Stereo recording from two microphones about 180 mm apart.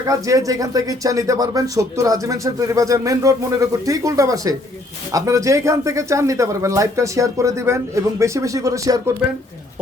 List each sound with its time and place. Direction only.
0.0 s speech: 20° right (ahead or behind)